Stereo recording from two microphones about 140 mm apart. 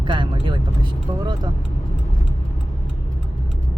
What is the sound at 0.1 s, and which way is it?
Speech, 35° right (ahead or behind).